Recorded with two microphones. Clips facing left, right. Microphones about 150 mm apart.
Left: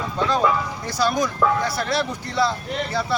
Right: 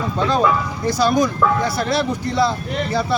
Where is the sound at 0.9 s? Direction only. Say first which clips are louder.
Right 6 dB; 25° right (ahead or behind).